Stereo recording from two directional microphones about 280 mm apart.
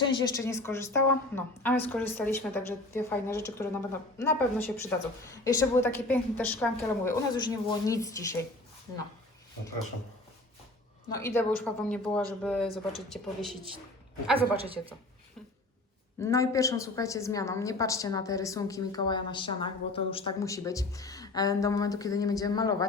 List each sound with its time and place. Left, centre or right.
0.0 s a woman's voice: centre
11.1 s speech: centre
14.3 s a woman's voice: centre
16.2 s a woman's voice: centre